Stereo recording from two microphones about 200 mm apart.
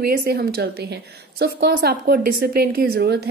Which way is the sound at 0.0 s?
50° right (ahead or behind).